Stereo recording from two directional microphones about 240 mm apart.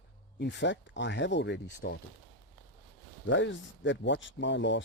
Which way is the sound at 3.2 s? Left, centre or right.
Left.